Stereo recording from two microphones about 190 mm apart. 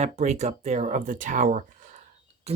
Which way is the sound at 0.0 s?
35° right (ahead or behind).